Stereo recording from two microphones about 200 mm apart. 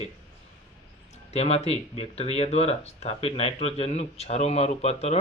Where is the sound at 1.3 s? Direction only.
30° left (ahead or behind).